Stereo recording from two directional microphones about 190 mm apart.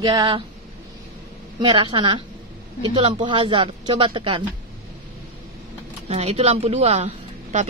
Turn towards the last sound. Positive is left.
turn(degrees=-35)  # may be behind; listen again after turning